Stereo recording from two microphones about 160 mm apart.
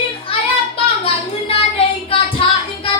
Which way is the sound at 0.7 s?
35° left (ahead or behind).